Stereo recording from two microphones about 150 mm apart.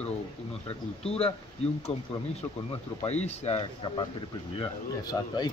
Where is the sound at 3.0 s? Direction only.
45° left (ahead or behind).